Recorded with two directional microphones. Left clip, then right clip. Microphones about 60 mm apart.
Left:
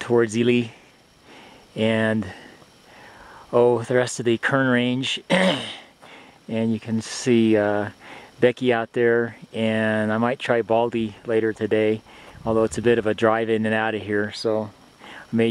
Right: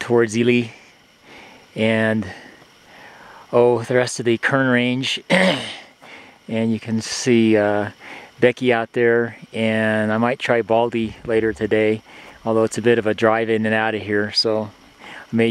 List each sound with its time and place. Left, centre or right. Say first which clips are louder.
0.0 s speech: right 3 dB; centre
1.8 s speech: right 3 dB; right
3.4 s speech: right 2 dB; centre
15.0 s a sound: right 3 dB; right